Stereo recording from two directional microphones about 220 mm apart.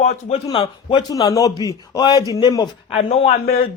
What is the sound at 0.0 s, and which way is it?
Speech, 30° left (ahead or behind).